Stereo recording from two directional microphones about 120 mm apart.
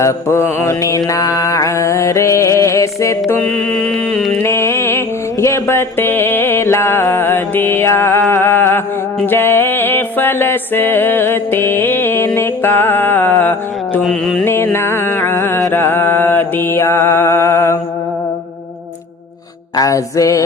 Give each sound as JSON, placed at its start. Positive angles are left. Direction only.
{"t": 0.0, "sound": "mantra", "side_deg": 20}
{"t": 3.7, "sound": "music", "side_deg": 0}
{"t": 4.4, "sound": "mantra", "side_deg": 25}
{"t": 9.2, "sound": "music", "side_deg": 20}
{"t": 14.0, "sound": "music", "side_deg": 0}
{"t": 14.4, "sound": "music", "side_deg": 20}
{"t": 19.7, "sound": "mantra", "side_deg": 30}